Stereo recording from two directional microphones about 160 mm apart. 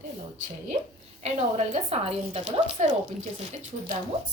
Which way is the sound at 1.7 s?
40° right (ahead or behind).